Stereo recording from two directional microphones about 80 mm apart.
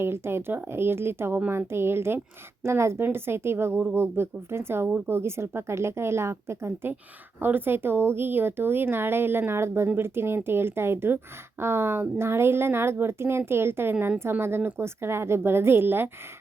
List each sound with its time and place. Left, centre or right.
0.0 s a woman's voice: right